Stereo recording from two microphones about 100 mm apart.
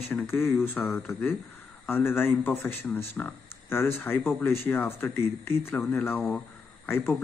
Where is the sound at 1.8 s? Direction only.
20° left (ahead or behind).